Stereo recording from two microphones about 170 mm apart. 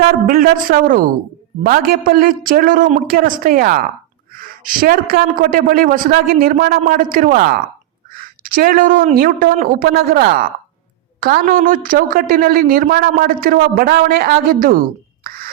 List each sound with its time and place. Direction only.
0.3 s a woman's voice: 55° right (ahead or behind)
15.2 s plop: 60° right (ahead or behind)